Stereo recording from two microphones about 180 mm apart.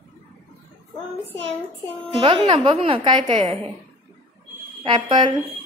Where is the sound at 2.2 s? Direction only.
25° right (ahead or behind).